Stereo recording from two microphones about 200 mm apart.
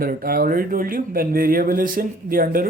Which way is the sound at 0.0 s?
45° right (ahead or behind).